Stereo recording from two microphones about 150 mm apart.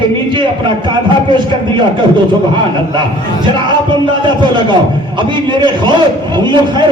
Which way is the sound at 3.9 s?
30° right (ahead or behind).